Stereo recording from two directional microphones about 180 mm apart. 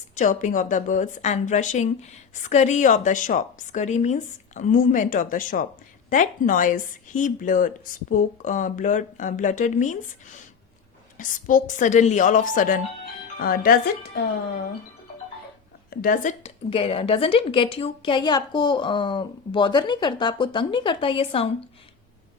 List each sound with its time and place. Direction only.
0.2 s a woman's voice: 45° left (ahead or behind)
11.2 s a woman's voice: 50° left (ahead or behind)
15.9 s a woman's voice: 55° left (ahead or behind)
16.6 s a woman's voice: 30° left (ahead or behind)